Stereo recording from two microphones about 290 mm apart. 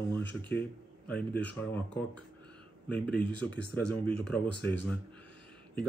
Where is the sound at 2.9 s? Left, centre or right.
Centre.